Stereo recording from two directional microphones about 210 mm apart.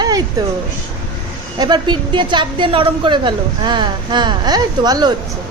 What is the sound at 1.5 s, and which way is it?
A woman's voice, 20° right (ahead or behind).